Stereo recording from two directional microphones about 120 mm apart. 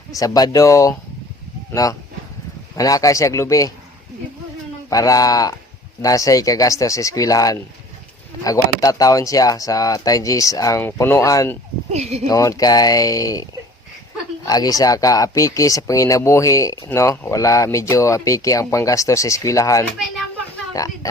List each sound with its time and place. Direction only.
0.2 s speech: 30° left (ahead or behind)
4.9 s speech: 30° left (ahead or behind)
11.9 s speech: 65° right (ahead or behind)
12.3 s speech: 30° left (ahead or behind)
14.4 s speech: 30° left (ahead or behind)